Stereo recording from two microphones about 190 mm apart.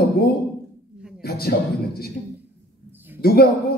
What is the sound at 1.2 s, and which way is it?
Speech, 55° left (ahead or behind).